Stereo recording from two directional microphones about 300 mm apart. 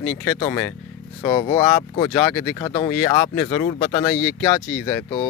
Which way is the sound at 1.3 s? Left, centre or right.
Centre.